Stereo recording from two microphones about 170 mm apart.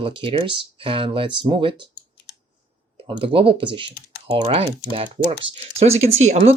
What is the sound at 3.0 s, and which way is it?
Speech, 30° right (ahead or behind).